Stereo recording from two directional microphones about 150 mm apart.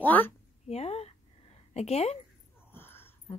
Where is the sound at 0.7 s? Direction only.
45° left (ahead or behind).